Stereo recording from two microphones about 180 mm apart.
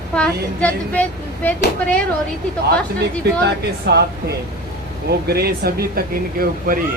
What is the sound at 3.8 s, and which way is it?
Speech, 65° right (ahead or behind).